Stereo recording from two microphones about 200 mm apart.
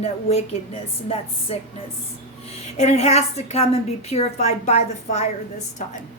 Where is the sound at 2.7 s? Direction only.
35° left (ahead or behind).